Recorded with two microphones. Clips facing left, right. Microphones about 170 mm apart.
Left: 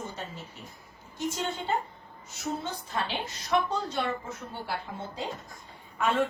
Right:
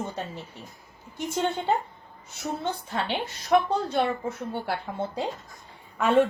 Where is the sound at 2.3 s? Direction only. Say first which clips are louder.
Right 3 dB; 60° right (ahead or behind).